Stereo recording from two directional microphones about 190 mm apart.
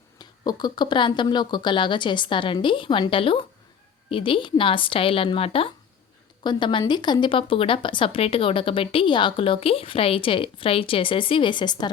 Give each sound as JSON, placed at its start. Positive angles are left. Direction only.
{"t": 0.2, "sound": "speech", "side_deg": 20}